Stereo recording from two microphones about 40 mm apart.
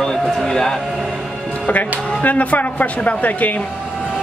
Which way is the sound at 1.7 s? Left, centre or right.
Left.